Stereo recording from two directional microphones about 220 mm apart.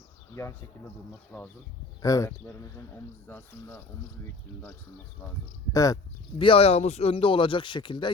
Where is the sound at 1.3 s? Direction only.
5° left (ahead or behind).